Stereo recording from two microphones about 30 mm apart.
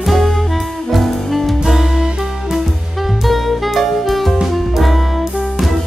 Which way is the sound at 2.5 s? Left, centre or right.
Centre.